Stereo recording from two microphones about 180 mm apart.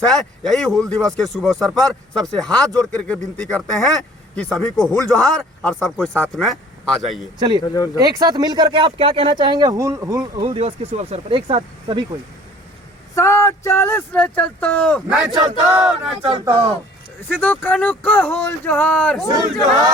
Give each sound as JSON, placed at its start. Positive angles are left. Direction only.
{"t": 0.1, "sound": "speech", "side_deg": 0}
{"t": 7.3, "sound": "speech", "side_deg": -25}
{"t": 7.6, "sound": "speech", "side_deg": 20}
{"t": 7.9, "sound": "speech", "side_deg": -20}
{"t": 13.1, "sound": "speech", "side_deg": 15}
{"t": 17.4, "sound": "speech", "side_deg": 10}